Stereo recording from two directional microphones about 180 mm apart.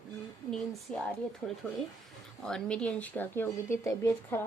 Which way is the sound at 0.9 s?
5° left (ahead or behind).